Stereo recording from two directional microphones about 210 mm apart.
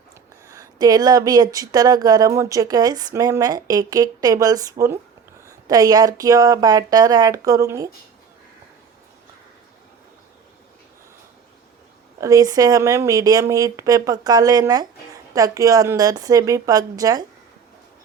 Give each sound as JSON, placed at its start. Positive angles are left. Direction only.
{"t": 0.4, "sound": "speech", "side_deg": -15}
{"t": 12.2, "sound": "speech", "side_deg": -15}